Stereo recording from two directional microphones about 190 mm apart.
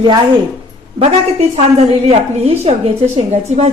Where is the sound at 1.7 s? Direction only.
30° right (ahead or behind).